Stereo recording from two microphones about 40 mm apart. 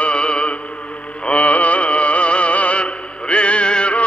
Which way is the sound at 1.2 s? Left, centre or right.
Left.